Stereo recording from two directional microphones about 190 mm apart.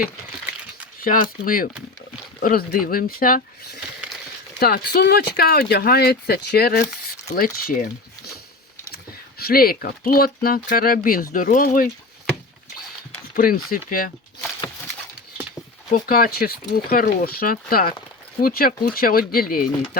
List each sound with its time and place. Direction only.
1.0 s speech: 45° left (ahead or behind)
7.3 s speech: 45° left (ahead or behind)
9.4 s speech: 50° left (ahead or behind)
13.3 s speech: 50° left (ahead or behind)
15.9 s speech: 50° left (ahead or behind)